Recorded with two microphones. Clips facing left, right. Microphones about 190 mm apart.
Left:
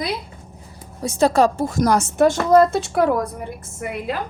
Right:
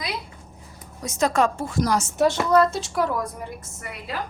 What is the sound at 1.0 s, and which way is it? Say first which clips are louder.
A woman's voice: left 5 dB; 30° left (ahead or behind).